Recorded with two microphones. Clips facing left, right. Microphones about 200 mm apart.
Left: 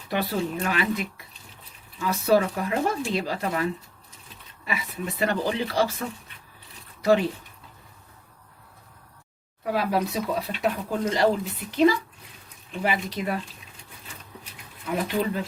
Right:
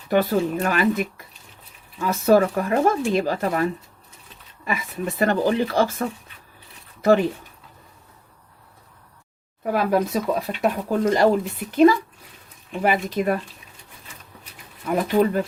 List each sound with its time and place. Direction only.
0.1 s speech: 45° right (ahead or behind)
9.7 s speech: 50° right (ahead or behind)
14.8 s speech: 50° right (ahead or behind)